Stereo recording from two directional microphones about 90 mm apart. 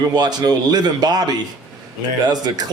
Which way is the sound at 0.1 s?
50° right (ahead or behind).